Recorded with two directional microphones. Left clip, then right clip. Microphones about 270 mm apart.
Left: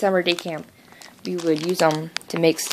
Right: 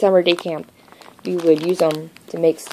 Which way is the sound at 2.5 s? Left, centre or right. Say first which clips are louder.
Right 3 dB; left.